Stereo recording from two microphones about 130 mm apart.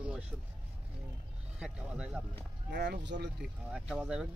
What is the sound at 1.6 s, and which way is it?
Speech, 10° right (ahead or behind).